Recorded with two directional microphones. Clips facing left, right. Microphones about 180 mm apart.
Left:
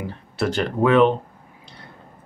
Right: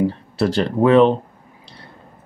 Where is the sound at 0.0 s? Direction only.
35° right (ahead or behind).